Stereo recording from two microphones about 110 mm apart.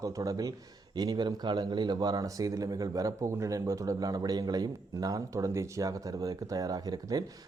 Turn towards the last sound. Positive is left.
turn(degrees=-35)  # may be behind; listen again after turning